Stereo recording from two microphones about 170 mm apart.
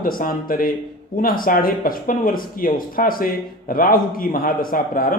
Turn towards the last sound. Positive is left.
turn(degrees=55)  # may be behind; listen again after turning